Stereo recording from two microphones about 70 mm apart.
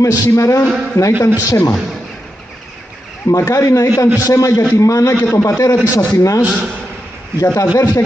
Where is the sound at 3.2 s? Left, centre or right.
Left.